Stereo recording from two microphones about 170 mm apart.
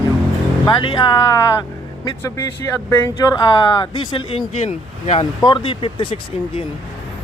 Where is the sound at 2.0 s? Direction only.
15° left (ahead or behind).